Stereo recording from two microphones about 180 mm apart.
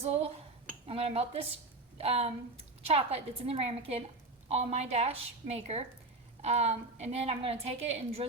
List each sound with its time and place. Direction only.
0.0 s a woman's voice: 35° right (ahead or behind)